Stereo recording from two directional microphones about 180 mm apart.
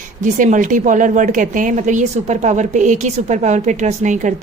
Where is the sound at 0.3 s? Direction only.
45° right (ahead or behind).